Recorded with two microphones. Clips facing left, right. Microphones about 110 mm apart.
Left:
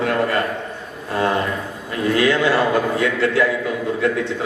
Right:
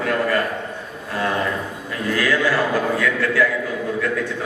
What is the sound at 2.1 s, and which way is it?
A man's voice, 25° left (ahead or behind).